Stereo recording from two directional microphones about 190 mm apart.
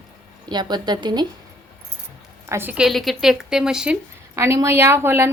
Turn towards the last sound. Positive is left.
turn(degrees=-10)  # may be behind; listen again after turning